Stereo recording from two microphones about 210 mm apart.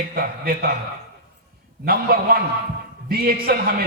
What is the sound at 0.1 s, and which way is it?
Speech, 45° right (ahead or behind).